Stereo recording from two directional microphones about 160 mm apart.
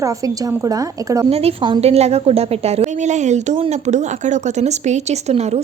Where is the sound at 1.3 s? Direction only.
40° right (ahead or behind).